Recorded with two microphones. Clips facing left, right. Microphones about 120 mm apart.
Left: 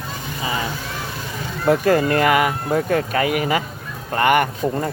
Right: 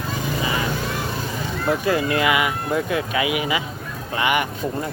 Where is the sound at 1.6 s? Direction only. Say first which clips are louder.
Left 5 dB; 50° left (ahead or behind).